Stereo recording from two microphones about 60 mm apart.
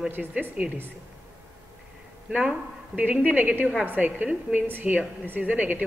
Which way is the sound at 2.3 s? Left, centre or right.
Right.